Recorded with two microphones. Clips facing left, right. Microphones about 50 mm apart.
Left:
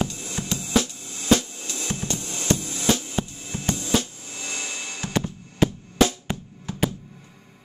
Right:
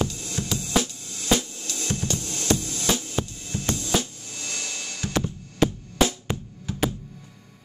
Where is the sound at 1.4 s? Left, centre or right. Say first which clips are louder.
Even; centre.